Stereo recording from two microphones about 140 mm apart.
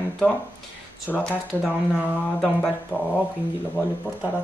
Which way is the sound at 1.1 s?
10° left (ahead or behind).